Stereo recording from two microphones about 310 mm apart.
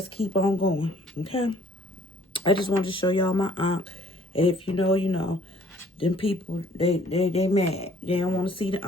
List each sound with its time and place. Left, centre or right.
0.3 s speech: centre